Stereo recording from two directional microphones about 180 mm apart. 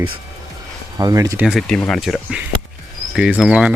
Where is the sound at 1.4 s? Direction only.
Centre (ahead or behind).